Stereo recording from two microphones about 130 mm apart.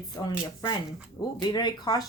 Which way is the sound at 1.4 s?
35° left (ahead or behind).